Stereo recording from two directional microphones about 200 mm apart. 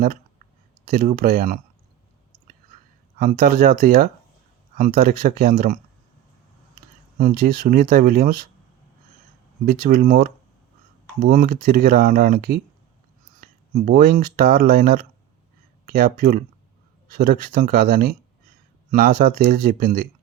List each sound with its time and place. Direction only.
0.9 s speech: 45° right (ahead or behind)
3.2 s speech: 45° right (ahead or behind)
7.2 s speech: 45° right (ahead or behind)
9.6 s speech: 45° right (ahead or behind)